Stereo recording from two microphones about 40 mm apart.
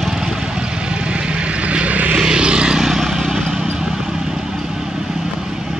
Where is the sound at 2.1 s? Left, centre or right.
Right.